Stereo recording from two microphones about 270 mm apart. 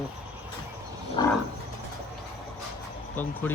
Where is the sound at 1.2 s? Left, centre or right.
Centre.